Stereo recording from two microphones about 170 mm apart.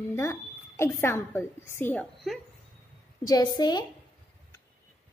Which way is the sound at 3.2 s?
25° left (ahead or behind).